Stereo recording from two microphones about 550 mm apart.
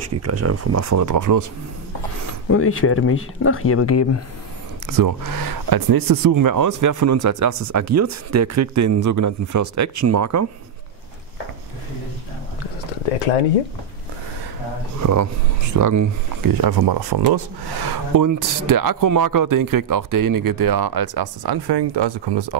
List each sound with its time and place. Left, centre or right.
0.0 s speech: right
2.5 s speech: left
4.8 s speech: right
15.0 s speech: right